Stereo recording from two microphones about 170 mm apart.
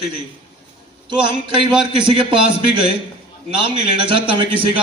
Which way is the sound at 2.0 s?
30° right (ahead or behind).